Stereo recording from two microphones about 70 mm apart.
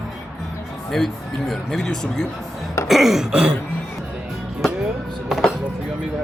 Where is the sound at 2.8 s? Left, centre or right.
Centre.